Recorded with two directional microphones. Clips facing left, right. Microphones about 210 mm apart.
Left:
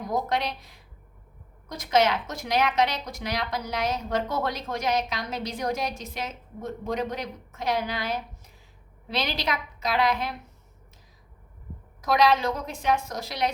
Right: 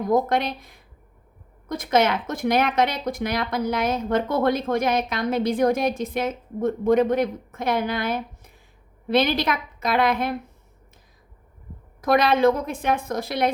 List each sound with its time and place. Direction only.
0.0 s a woman's voice: 50° right (ahead or behind)
12.0 s a woman's voice: 55° right (ahead or behind)